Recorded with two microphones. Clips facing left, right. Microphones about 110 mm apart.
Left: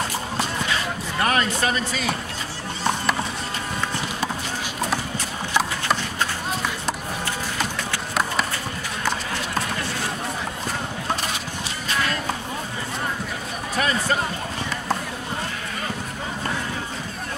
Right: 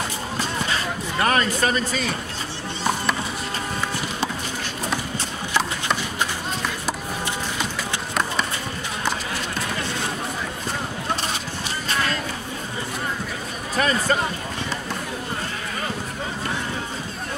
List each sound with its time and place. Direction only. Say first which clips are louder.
1.2 s a man's voice: right 1 dB; 35° right (ahead or behind)